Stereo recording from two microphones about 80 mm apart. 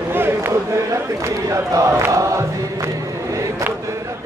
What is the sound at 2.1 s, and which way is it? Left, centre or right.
Chant, right.